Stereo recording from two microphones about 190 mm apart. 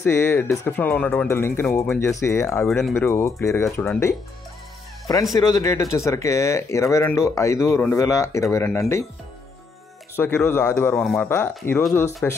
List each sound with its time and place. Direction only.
0.0 s speech: 15° left (ahead or behind)
5.5 s speech: 15° left (ahead or behind)
10.1 s speech: 10° left (ahead or behind)